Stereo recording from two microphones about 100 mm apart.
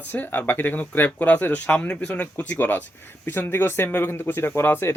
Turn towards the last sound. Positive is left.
turn(degrees=25)  # may be behind; listen again after turning